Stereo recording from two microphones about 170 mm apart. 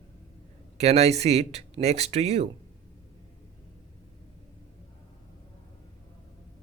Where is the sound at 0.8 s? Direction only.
40° right (ahead or behind).